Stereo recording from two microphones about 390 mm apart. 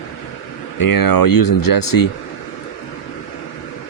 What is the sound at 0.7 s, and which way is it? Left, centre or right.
Speech, left.